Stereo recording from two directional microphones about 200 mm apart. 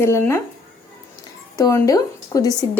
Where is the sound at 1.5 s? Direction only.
15° left (ahead or behind).